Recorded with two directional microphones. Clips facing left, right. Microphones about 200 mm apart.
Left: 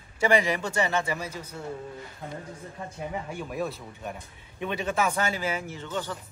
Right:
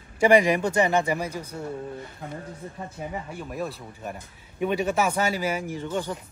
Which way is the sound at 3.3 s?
Centre (ahead or behind).